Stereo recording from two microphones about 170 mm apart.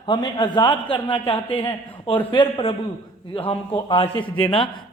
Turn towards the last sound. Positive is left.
turn(degrees=30)  # may be behind; listen again after turning